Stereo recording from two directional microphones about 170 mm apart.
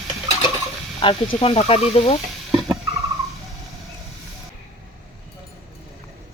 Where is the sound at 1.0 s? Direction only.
35° left (ahead or behind).